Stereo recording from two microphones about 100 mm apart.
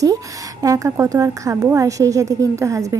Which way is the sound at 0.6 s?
35° right (ahead or behind).